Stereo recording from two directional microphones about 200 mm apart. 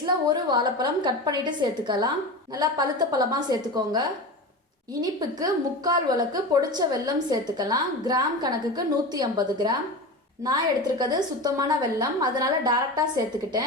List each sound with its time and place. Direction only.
0.0 s a woman's voice: 20° right (ahead or behind)